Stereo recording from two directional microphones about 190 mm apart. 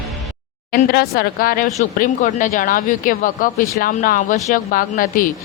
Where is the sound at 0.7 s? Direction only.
50° left (ahead or behind).